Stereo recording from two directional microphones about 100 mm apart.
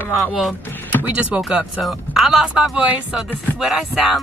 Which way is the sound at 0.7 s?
20° left (ahead or behind).